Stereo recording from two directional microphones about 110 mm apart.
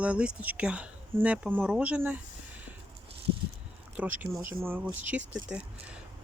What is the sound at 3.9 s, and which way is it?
Speech, 15° right (ahead or behind).